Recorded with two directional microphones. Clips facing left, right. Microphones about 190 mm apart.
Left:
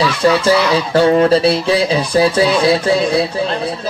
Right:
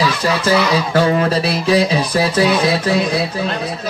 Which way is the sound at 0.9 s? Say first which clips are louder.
Left 6 dB; 30° left (ahead or behind).